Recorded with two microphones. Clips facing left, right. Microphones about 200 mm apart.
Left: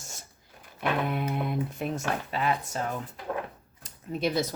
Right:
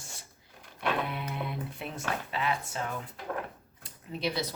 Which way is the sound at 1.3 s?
45° left (ahead or behind).